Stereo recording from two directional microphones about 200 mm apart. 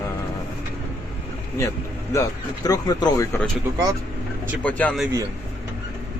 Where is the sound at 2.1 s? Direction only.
15° left (ahead or behind).